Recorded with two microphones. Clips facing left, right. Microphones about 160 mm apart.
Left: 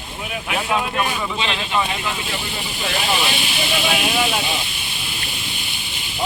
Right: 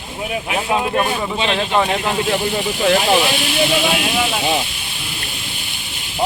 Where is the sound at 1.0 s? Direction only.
40° right (ahead or behind).